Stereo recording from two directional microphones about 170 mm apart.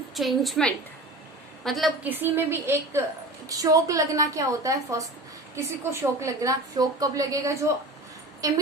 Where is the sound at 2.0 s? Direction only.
10° right (ahead or behind).